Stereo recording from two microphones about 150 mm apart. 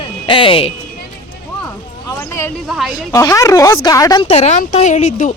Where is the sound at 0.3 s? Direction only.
35° left (ahead or behind).